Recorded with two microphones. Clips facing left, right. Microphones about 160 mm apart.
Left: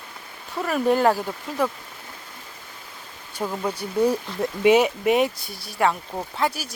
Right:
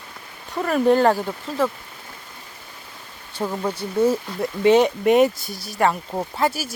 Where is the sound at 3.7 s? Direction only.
15° left (ahead or behind); by 6.7 s 5° right (ahead or behind).